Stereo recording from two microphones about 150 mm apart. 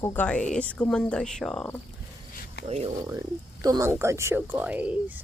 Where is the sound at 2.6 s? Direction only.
45° right (ahead or behind).